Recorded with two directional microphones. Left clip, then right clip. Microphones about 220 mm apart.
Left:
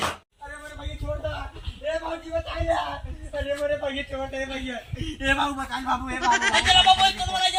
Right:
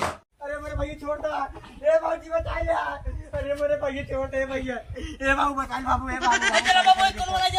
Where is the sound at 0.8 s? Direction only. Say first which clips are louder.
Right 2 dB; 15° right (ahead or behind).